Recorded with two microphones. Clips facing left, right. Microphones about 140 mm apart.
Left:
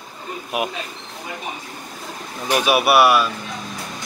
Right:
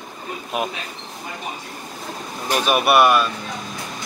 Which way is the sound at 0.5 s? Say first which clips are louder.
Left 1 dB; 5° left (ahead or behind).